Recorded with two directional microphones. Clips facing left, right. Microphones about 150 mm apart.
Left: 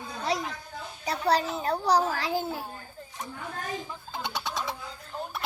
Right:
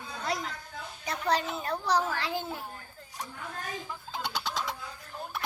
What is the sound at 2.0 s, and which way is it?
Speech, 35° left (ahead or behind).